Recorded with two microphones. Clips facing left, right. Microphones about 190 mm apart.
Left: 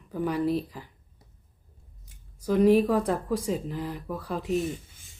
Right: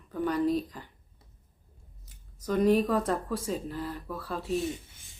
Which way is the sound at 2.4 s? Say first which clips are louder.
Left 4 dB; 10° left (ahead or behind).